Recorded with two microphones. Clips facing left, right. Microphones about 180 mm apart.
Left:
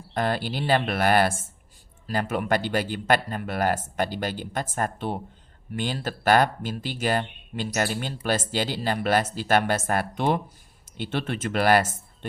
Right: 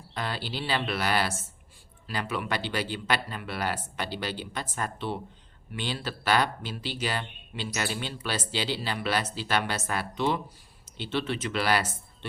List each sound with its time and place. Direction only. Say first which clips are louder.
0.1 s speech: left 7 dB; 50° left (ahead or behind)